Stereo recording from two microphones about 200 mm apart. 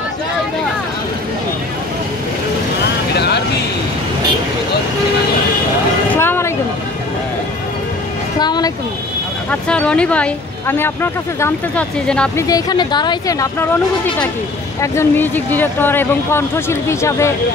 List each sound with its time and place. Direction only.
3.2 s vehicle: 55° left (ahead or behind)
6.1 s vehicle: 10° left (ahead or behind)
8.4 s speech: 20° left (ahead or behind)
9.5 s speech: 5° left (ahead or behind)
12.4 s speech: 20° left (ahead or behind)
14.8 s speech: 10° left (ahead or behind)